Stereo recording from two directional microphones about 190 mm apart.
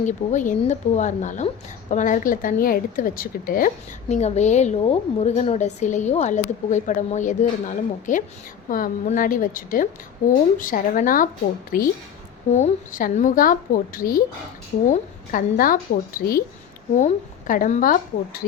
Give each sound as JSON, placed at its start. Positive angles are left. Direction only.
{"t": 0.0, "sound": "a woman's voice", "side_deg": 40}
{"t": 4.1, "sound": "a woman's voice", "side_deg": 35}
{"t": 16.9, "sound": "a woman's voice", "side_deg": 40}